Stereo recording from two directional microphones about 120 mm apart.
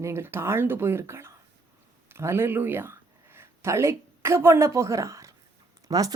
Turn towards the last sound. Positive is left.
turn(degrees=-30)  # may be behind; listen again after turning